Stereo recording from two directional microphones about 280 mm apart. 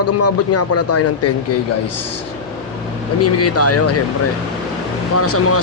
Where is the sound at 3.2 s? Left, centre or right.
Left.